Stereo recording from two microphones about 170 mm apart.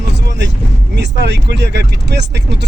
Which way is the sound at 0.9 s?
90° right.